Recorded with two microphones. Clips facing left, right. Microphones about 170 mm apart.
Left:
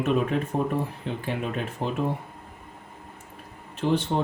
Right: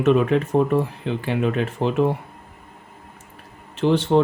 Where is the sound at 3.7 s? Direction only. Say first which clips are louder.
Right 5 dB; 80° right.